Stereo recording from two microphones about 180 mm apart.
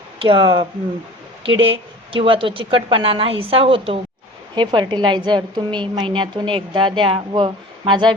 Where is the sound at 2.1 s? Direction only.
30° right (ahead or behind).